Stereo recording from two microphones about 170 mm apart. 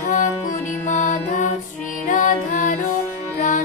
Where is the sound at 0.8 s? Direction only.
45° left (ahead or behind).